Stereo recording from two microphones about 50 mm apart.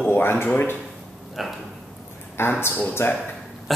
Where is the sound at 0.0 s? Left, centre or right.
Left.